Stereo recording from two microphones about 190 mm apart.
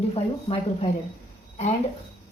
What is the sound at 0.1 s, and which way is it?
Speech, 30° left (ahead or behind).